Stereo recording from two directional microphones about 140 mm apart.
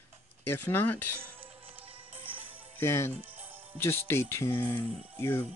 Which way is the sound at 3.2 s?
15° right (ahead or behind).